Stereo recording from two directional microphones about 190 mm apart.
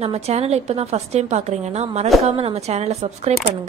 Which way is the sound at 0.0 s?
35° right (ahead or behind).